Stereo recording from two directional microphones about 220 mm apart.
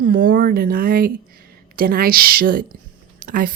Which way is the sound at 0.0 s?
40° right (ahead or behind).